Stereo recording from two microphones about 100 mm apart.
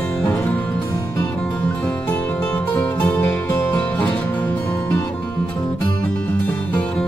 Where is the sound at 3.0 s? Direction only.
20° left (ahead or behind).